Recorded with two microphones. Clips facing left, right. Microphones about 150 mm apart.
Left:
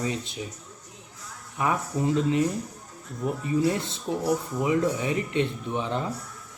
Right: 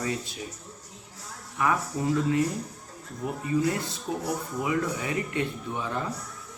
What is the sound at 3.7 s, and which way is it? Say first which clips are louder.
Speech: left 2 dB; 25° left (ahead or behind).